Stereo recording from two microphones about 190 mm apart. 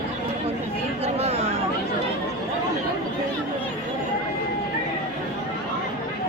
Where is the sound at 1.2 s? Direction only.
30° right (ahead or behind).